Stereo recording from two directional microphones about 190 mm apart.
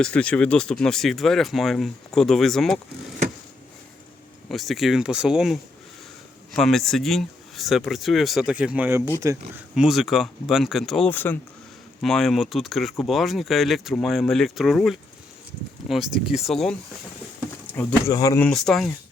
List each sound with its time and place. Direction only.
0.0 s speech: 5° left (ahead or behind)
4.4 s speech: centre (ahead or behind)
16.3 s speech: centre (ahead or behind)
17.7 s speech: 15° left (ahead or behind)
18.4 s speech: 5° left (ahead or behind)